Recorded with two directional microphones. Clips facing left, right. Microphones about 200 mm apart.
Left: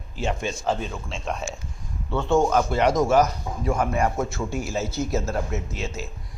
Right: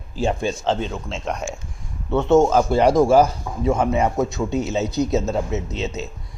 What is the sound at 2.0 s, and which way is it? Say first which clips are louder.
Speech: right 5 dB; 20° right (ahead or behind).